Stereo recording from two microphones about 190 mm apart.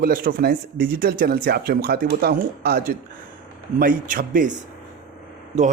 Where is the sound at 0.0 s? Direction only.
50° right (ahead or behind).